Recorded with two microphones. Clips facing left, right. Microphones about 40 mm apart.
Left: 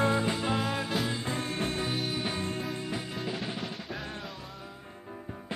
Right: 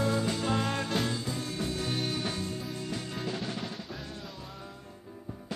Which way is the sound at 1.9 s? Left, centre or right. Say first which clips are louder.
Left 1 dB; centre.